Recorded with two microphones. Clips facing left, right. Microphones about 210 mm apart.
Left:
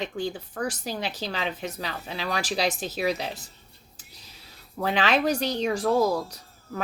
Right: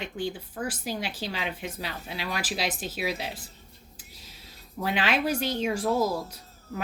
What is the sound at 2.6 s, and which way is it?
Speech, 40° left (ahead or behind).